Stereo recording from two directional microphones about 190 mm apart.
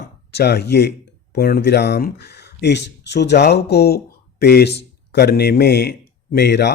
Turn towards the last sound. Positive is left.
turn(degrees=60)  # may be behind; listen again after turning